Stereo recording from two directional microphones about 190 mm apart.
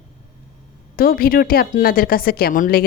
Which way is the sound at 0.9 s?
50° left (ahead or behind).